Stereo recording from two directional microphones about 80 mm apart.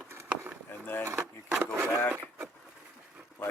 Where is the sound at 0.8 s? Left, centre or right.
Left.